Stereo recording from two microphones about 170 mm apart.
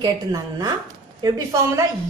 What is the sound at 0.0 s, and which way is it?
A woman's voice, 25° right (ahead or behind).